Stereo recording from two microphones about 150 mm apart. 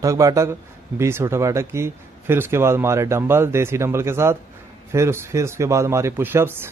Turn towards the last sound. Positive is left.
turn(degrees=-15)  # may be behind; listen again after turning